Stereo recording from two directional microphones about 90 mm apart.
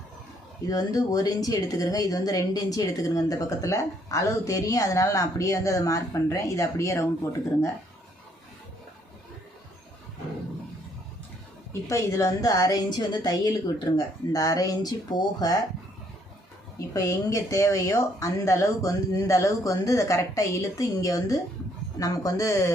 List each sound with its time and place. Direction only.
0.6 s a woman's voice: 40° left (ahead or behind)
11.7 s a woman's voice: 30° left (ahead or behind)
16.7 s a woman's voice: 35° left (ahead or behind)